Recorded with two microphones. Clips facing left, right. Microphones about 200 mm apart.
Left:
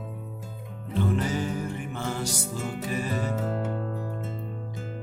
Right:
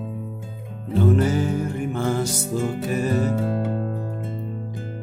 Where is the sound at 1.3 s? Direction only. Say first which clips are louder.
Right 6 dB; 45° right (ahead or behind).